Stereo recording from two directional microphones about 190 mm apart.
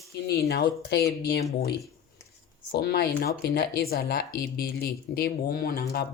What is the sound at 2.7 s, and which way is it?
Speech, 60° left (ahead or behind).